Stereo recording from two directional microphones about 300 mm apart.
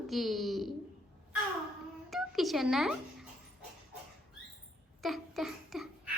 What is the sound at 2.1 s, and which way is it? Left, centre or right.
Music, centre.